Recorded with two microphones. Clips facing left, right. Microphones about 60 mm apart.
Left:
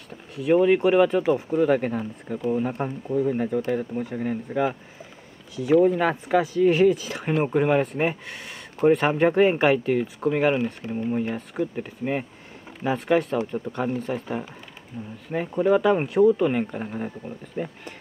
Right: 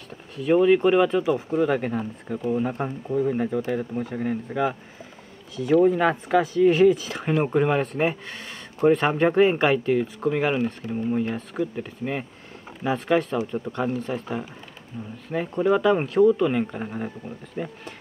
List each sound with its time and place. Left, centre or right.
0.5 s speech: centre
14.9 s speech: centre
16.7 s speech: centre